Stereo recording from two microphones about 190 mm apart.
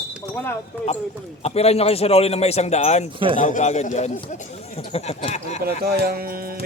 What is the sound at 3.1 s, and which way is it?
Speech, 25° right (ahead or behind).